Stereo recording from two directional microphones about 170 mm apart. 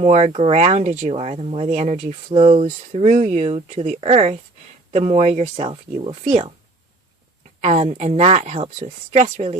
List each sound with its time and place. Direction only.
0.0 s speech: 40° right (ahead or behind)
6.2 s speech: 45° right (ahead or behind)
7.6 s speech: 40° right (ahead or behind)